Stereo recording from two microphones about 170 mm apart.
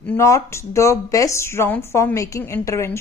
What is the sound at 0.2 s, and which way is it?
Speech, 20° left (ahead or behind).